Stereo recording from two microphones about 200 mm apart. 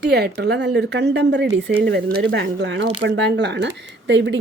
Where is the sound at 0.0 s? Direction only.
55° right (ahead or behind).